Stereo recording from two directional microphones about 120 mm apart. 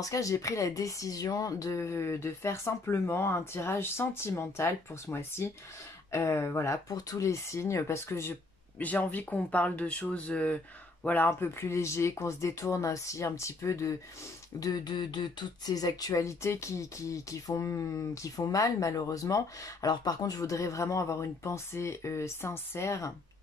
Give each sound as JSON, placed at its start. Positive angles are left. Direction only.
{"t": 0.0, "sound": "speech", "side_deg": 25}